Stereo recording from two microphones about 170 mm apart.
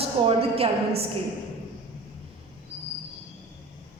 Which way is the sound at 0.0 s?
35° right (ahead or behind).